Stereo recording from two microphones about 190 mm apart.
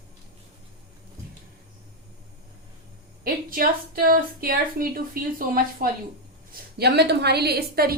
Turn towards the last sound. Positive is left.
turn(degrees=-55)  # may be behind; listen again after turning